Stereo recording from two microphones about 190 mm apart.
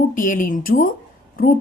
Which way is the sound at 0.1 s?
45° left (ahead or behind).